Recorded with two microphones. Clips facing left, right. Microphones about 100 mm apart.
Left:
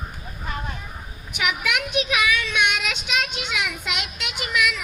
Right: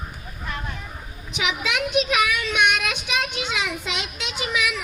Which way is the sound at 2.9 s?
15° right (ahead or behind).